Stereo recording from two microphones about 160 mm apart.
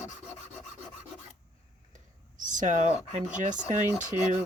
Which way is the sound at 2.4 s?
50° right (ahead or behind).